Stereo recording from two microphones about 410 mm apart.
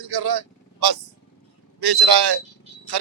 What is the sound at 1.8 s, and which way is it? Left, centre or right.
Speech, right.